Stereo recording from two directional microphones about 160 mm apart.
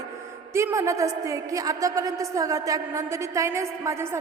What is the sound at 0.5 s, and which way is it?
A woman's voice, 15° right (ahead or behind).